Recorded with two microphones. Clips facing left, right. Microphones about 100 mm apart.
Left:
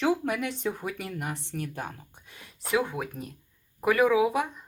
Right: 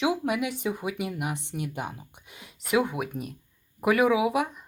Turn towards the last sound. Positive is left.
turn(degrees=-10)  # may be behind; listen again after turning